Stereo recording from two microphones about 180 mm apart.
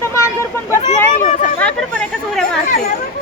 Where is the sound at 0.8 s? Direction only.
40° left (ahead or behind).